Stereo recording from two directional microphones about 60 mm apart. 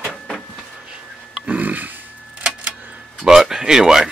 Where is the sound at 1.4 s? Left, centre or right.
Right.